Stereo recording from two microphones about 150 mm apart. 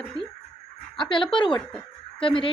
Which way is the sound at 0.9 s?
35° left (ahead or behind).